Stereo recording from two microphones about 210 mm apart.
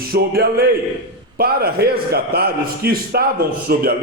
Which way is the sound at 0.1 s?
45° right (ahead or behind).